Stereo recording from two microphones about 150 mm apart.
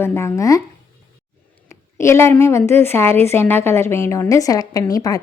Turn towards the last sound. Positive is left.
turn(degrees=25)  # may be behind; listen again after turning